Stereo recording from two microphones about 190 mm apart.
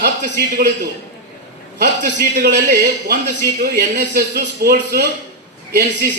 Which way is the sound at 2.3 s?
60° right (ahead or behind).